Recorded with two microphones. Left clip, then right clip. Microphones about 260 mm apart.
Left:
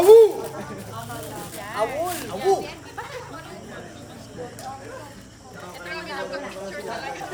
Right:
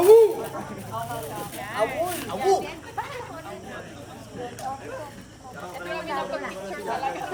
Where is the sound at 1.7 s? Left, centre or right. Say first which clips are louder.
Left 1 dB; centre.